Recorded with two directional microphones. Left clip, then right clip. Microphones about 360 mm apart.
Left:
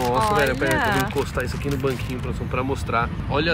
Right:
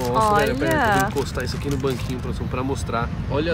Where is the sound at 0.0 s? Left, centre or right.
Centre.